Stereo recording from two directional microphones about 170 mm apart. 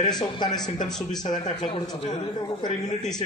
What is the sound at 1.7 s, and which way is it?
A man's voice, 25° left (ahead or behind).